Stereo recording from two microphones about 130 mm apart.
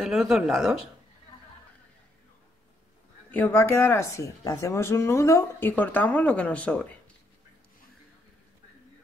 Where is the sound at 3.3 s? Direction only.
15° left (ahead or behind).